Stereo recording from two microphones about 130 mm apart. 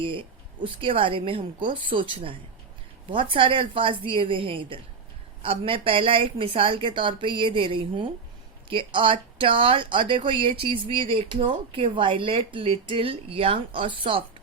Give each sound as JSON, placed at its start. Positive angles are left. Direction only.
{"t": 0.0, "sound": "speech", "side_deg": -40}